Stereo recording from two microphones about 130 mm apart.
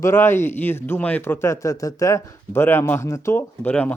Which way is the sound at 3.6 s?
10° left (ahead or behind).